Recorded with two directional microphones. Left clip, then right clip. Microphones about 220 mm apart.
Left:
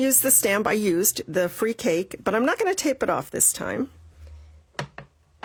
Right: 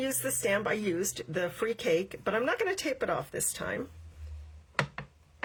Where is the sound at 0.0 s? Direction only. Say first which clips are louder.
Left 9 dB; 45° left (ahead or behind).